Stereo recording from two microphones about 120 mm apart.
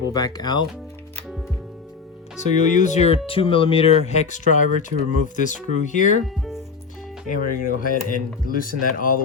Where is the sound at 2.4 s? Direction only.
80° left.